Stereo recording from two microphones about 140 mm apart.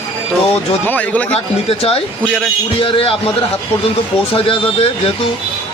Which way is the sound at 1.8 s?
45° left (ahead or behind).